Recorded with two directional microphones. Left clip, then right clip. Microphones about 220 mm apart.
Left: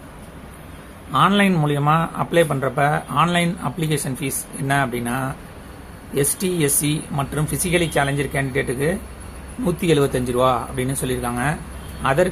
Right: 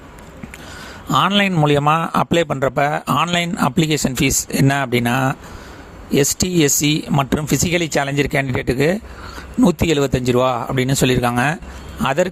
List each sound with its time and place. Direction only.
1.1 s speech: 50° right (ahead or behind)